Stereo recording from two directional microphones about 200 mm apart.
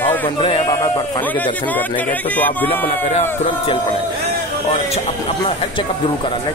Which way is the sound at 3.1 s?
35° left (ahead or behind).